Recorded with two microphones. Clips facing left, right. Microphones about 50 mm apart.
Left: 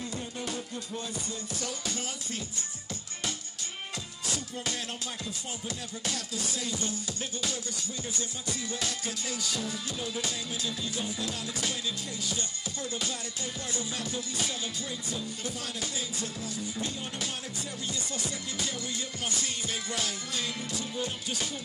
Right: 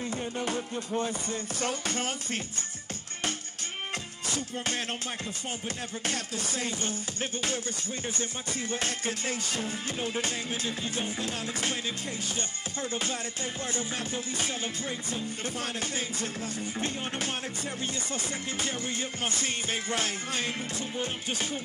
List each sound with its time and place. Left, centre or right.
0.0 s music: right
4.3 s music: right
6.0 s music: right
12.9 s music: right